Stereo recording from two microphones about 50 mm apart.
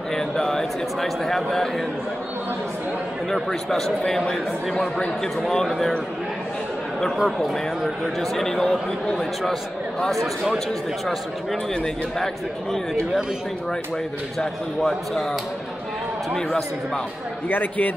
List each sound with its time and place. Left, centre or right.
0.1 s a sound: centre
1.0 s speech: centre
3.4 s a man's voice: centre
7.2 s speech: centre
14.8 s speech: centre
16.3 s a man's voice: centre
17.5 s speech: left